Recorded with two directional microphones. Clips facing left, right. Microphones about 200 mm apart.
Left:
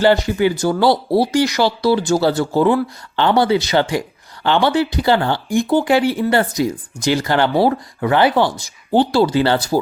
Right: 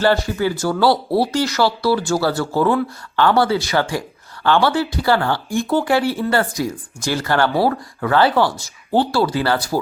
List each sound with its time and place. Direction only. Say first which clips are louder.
0.0 s speech: left 3 dB; 15° left (ahead or behind)